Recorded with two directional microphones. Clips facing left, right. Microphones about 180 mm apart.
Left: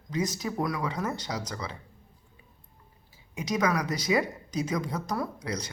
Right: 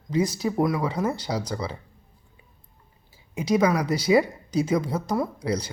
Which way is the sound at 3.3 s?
30° right (ahead or behind).